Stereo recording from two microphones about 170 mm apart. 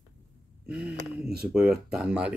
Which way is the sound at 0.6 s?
10° right (ahead or behind).